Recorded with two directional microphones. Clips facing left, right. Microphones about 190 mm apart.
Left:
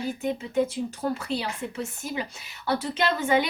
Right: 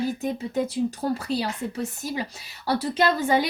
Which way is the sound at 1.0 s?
35° right (ahead or behind).